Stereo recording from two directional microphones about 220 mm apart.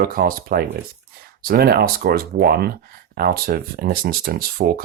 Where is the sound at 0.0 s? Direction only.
40° right (ahead or behind).